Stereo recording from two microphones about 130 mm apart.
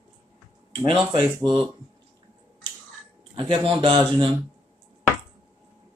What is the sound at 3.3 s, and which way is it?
Speech, 40° right (ahead or behind).